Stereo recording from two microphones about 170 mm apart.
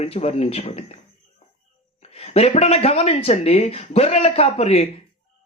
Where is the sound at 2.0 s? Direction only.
35° left (ahead or behind).